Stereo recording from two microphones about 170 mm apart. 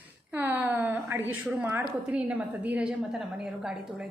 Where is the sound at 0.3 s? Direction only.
10° right (ahead or behind).